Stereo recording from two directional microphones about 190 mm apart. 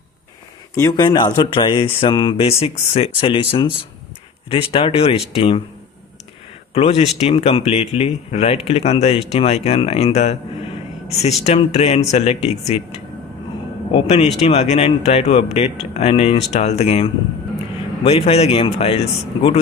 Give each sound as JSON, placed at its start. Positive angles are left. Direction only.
{"t": 0.7, "sound": "speech", "side_deg": 20}
{"t": 6.7, "sound": "speech", "side_deg": 30}
{"t": 11.4, "sound": "speech", "side_deg": 35}
{"t": 13.9, "sound": "speech", "side_deg": 30}